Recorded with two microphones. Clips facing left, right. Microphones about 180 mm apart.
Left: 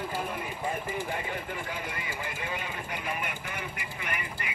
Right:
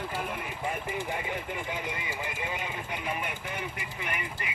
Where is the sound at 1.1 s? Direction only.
15° right (ahead or behind).